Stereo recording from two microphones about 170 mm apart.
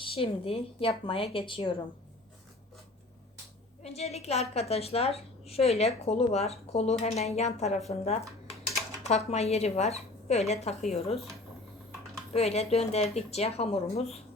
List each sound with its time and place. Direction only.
0.0 s a woman's voice: 30° left (ahead or behind)
3.8 s a woman's voice: 40° left (ahead or behind)
12.3 s a woman's voice: 40° left (ahead or behind)